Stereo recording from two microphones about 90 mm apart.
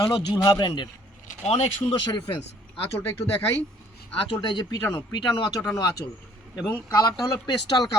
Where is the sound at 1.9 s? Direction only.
55° left (ahead or behind).